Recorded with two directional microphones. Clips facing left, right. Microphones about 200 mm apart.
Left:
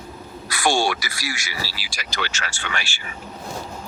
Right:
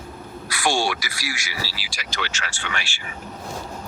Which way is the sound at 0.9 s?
45° left (ahead or behind).